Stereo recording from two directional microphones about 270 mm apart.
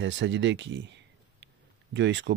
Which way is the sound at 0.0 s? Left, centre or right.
Right.